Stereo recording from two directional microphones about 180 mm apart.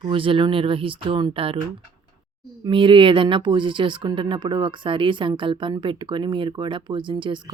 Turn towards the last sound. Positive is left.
turn(degrees=-25)  # may be behind; listen again after turning